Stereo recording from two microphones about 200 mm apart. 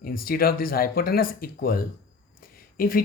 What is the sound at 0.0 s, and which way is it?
A woman's voice, 45° left (ahead or behind).